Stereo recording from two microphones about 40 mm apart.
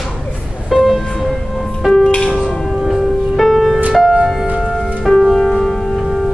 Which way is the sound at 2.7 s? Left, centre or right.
Centre.